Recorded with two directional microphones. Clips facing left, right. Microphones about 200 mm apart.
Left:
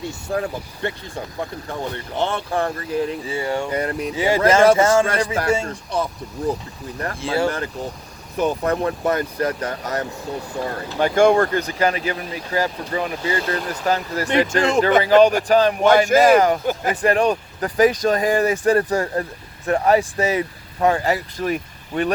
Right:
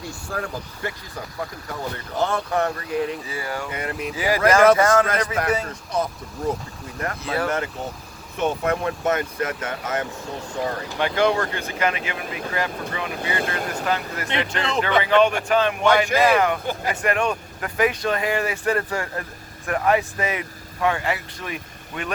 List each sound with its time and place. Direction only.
0.0 s speech: 25° left (ahead or behind)
7.0 s speech: 30° left (ahead or behind)